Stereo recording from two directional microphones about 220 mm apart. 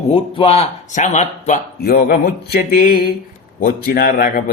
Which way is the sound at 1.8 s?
45° left (ahead or behind).